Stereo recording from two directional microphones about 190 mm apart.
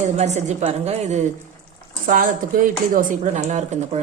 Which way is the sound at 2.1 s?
45° right (ahead or behind).